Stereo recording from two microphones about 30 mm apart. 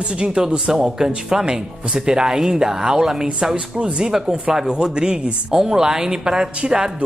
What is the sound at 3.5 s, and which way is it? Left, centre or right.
Speech, right.